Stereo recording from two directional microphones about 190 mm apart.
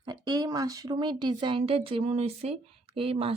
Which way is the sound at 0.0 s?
20° right (ahead or behind).